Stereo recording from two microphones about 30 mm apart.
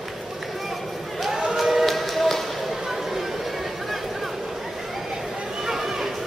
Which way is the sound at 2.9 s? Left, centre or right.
Centre.